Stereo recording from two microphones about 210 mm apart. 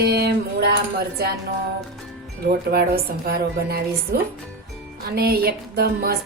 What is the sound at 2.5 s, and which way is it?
A woman's voice, 45° right (ahead or behind).